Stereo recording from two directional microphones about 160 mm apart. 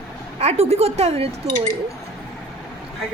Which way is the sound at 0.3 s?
40° right (ahead or behind).